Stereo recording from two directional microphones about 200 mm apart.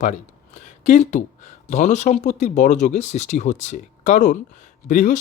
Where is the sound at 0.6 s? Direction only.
40° left (ahead or behind).